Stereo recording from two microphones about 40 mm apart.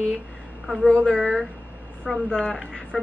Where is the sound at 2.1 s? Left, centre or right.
Centre.